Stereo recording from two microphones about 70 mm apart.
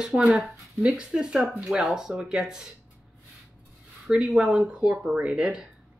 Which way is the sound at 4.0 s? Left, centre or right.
Centre.